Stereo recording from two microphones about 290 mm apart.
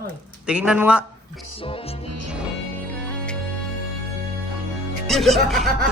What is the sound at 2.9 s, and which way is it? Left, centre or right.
Music, centre.